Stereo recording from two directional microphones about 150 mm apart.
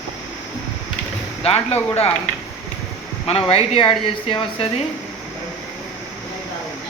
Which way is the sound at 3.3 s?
40° left (ahead or behind).